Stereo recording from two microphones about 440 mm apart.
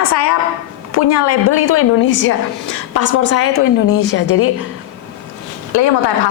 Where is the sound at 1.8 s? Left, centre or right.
Left.